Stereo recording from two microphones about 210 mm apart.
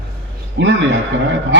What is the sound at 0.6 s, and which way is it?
Speech, 60° right (ahead or behind).